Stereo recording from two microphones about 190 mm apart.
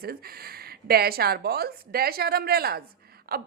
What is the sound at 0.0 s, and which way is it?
A woman's voice, 55° right (ahead or behind).